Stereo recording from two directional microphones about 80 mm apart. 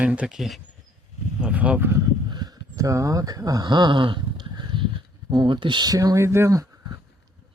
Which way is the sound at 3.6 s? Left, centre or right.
Right.